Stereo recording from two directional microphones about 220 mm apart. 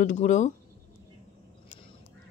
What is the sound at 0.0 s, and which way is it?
Speech, 35° left (ahead or behind).